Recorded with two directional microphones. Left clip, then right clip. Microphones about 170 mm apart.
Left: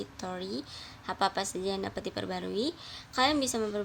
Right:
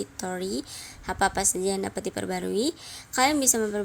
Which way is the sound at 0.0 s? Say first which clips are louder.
Right 6 dB; 35° right (ahead or behind).